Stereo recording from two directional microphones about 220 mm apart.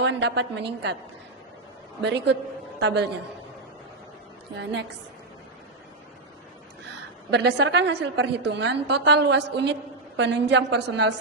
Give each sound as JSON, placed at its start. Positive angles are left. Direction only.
{"t": 0.0, "sound": "a woman's voice", "side_deg": -50}
{"t": 2.0, "sound": "a woman's voice", "side_deg": -50}
{"t": 4.5, "sound": "a woman's voice", "side_deg": -50}
{"t": 7.3, "sound": "a woman's voice", "side_deg": -50}